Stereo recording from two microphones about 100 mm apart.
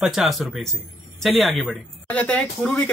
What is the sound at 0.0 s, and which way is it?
Speech, centre (ahead or behind).